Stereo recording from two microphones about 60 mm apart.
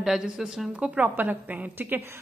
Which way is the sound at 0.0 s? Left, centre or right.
Centre.